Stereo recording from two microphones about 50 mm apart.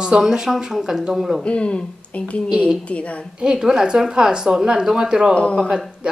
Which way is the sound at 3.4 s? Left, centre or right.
Centre.